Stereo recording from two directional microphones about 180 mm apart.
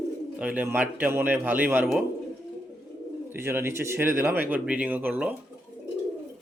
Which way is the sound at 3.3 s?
15° right (ahead or behind).